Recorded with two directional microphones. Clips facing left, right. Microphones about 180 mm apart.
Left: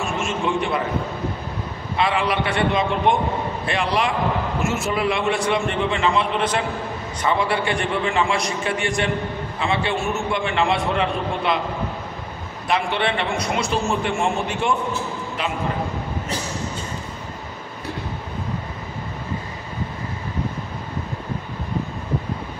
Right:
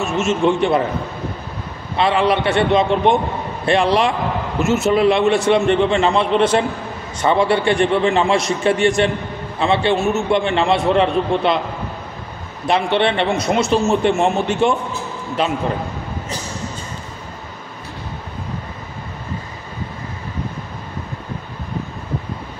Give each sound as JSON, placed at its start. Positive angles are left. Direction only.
{"t": 0.0, "sound": "a man's voice", "side_deg": -25}
{"t": 2.0, "sound": "a man's voice", "side_deg": -25}
{"t": 12.6, "sound": "a man's voice", "side_deg": -25}